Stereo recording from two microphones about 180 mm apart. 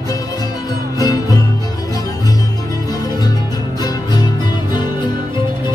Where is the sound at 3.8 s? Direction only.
25° left (ahead or behind).